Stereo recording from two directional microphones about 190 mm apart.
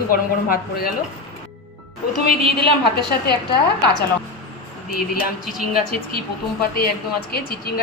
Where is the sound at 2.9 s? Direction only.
55° left (ahead or behind).